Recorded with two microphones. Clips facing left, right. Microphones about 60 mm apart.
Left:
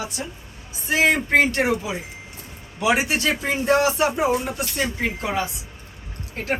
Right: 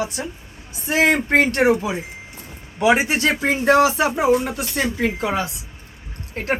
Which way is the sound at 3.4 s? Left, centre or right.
Right.